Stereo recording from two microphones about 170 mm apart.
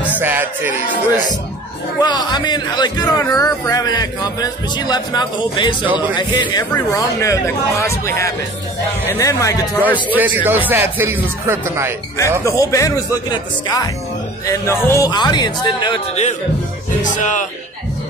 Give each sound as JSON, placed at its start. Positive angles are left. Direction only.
{"t": 0.0, "sound": "music", "side_deg": -10}
{"t": 2.0, "sound": "a man's voice", "side_deg": 25}
{"t": 10.1, "sound": "speech", "side_deg": -10}
{"t": 12.4, "sound": "a man's voice", "side_deg": 20}
{"t": 17.0, "sound": "speech", "side_deg": 45}